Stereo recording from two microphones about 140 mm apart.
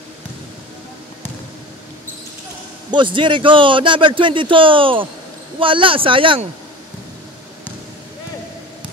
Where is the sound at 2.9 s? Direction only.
35° right (ahead or behind).